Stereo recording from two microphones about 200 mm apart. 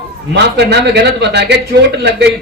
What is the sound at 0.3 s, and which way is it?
A man's voice, 55° right (ahead or behind).